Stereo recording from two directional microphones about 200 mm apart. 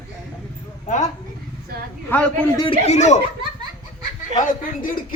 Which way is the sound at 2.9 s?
35° left (ahead or behind).